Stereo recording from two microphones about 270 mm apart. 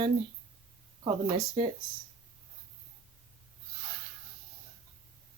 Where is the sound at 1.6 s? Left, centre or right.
Centre.